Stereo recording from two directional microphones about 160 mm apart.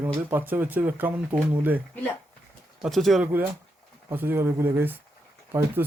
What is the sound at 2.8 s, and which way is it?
Speech, centre (ahead or behind).